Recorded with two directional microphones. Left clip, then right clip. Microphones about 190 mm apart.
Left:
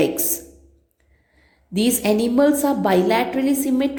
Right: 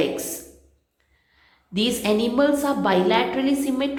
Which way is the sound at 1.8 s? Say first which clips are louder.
Left 2 dB; 35° left (ahead or behind).